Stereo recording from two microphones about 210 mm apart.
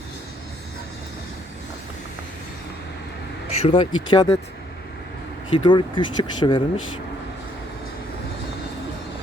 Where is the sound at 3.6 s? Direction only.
25° left (ahead or behind).